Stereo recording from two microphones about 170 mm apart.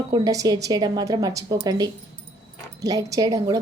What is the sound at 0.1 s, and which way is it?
Speech, 20° right (ahead or behind).